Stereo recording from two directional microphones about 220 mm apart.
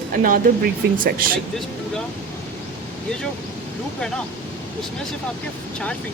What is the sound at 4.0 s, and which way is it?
Speech, 5° left (ahead or behind).